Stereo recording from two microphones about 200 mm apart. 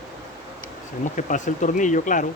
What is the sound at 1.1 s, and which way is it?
Speech, 40° left (ahead or behind).